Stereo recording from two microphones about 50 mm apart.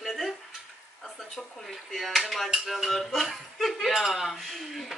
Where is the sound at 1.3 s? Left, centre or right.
Centre.